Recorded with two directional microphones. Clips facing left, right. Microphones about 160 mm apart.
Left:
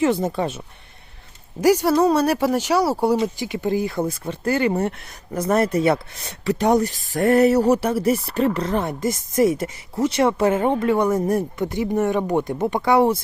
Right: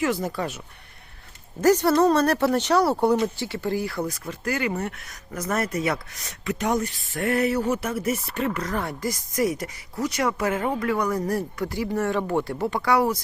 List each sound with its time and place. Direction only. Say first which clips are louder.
0.0 s speech: left 5 dB; 25° left (ahead or behind)
1.6 s speech: left 2 dB; 10° left (ahead or behind); by 13.2 s 25° left (ahead or behind)